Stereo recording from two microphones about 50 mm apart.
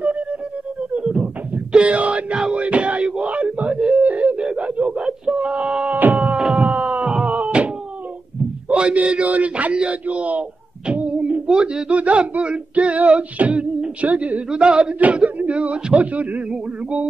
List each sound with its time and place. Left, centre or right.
0.0 s music: right
0.9 s beatboxing: right
1.7 s speech: right
2.5 s wail: right
4.0 s a sound: right
4.4 s a sound: centre
5.9 s music: right
6.3 s a sound: centre
9.0 s a man's voice: right
11.1 s music: right
11.4 s speech: centre; by 14.4 s right
14.5 s speech: centre